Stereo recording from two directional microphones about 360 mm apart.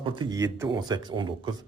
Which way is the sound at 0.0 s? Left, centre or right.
Centre.